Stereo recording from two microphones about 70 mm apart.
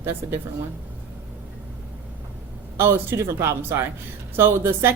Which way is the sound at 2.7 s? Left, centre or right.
Right.